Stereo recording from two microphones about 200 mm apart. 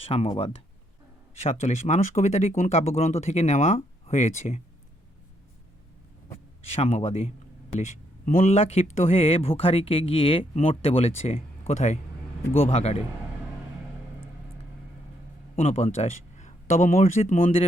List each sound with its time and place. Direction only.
0.0 s speech: 30° left (ahead or behind)
6.3 s speech: 30° left (ahead or behind)
15.5 s speech: 30° left (ahead or behind)